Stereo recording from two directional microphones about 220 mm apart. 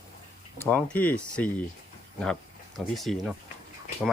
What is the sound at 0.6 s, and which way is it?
Speech, 10° left (ahead or behind).